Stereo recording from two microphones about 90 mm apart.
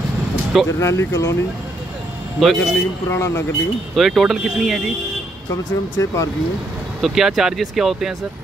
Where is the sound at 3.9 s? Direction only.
Centre (ahead or behind).